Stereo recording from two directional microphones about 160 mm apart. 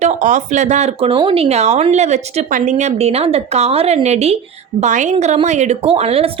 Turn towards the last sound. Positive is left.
turn(degrees=-40)  # may be behind; listen again after turning